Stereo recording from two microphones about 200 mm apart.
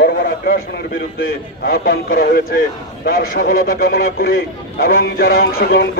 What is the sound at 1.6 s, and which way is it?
A man's voice, 50° left (ahead or behind).